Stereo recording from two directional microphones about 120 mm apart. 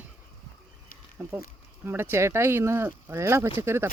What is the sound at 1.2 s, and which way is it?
Speech, 20° right (ahead or behind).